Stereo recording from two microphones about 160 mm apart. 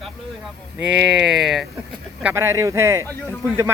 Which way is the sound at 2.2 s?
15° right (ahead or behind).